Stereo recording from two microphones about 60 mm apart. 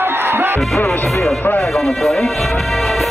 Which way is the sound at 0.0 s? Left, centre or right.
Right.